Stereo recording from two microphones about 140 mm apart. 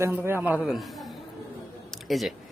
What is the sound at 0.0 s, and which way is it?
Speech, 15° right (ahead or behind).